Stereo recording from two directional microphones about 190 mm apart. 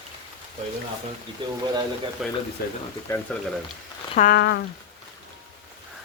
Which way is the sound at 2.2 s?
Centre (ahead or behind).